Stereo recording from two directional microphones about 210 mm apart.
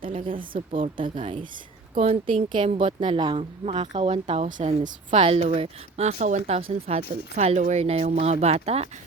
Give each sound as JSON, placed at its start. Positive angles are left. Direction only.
{"t": 0.0, "sound": "a woman's voice", "side_deg": -25}